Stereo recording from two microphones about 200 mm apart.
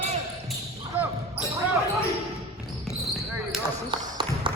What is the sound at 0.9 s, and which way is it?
Basketball bounce, 10° right (ahead or behind).